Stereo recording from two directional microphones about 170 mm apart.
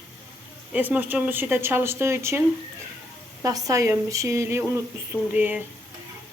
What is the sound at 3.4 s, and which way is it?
Speech, 20° right (ahead or behind).